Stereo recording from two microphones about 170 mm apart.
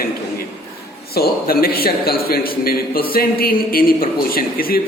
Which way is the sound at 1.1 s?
65° left (ahead or behind).